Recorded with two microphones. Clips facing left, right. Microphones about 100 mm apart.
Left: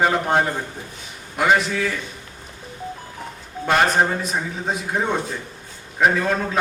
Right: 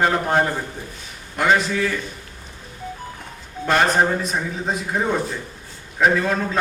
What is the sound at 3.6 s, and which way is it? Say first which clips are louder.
A man's voice: even; centre (ahead or behind).